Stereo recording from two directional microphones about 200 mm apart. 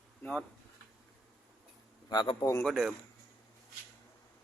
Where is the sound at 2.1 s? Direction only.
20° left (ahead or behind).